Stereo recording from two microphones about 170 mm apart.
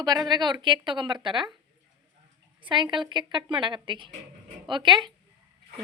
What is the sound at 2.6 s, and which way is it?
A woman's voice, 25° right (ahead or behind).